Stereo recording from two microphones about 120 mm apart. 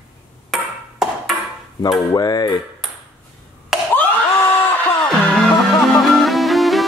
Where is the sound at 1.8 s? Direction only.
35° left (ahead or behind).